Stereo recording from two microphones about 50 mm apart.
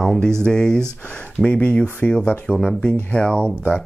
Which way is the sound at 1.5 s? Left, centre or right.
Left.